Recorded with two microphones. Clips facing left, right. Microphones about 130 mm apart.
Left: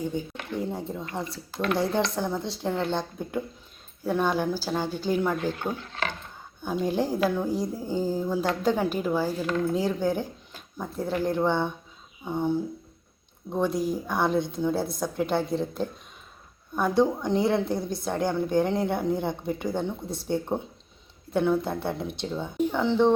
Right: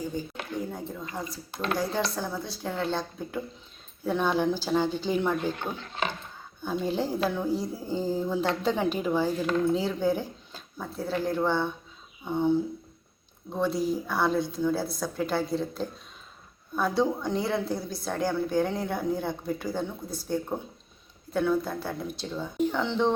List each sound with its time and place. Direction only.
0.1 s speech: 5° right (ahead or behind)
0.6 s a woman's voice: 25° left (ahead or behind); by 5.4 s 10° left (ahead or behind)
5.7 s speech: 15° right (ahead or behind)
6.6 s a woman's voice: 15° left (ahead or behind)